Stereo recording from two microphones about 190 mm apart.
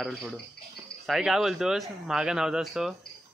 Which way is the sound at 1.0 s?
Centre (ahead or behind).